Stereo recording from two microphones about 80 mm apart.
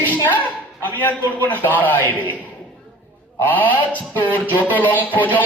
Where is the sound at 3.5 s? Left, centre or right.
Left.